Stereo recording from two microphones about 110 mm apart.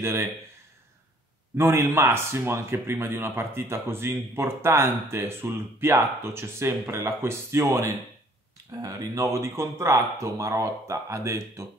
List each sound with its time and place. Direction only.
0.0 s speech: 20° right (ahead or behind)
1.6 s speech: 25° right (ahead or behind)